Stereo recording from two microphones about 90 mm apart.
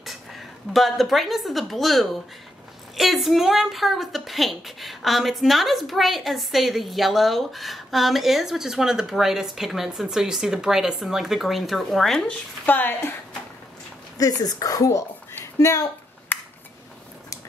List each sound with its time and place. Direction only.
0.7 s a woman's voice: centre (ahead or behind)
12.6 s speech: 20° left (ahead or behind)
14.1 s speech: 40° left (ahead or behind)
16.3 s a sound: 20° left (ahead or behind)